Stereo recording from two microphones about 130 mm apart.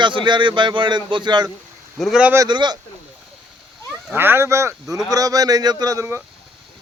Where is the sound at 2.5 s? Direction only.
35° right (ahead or behind).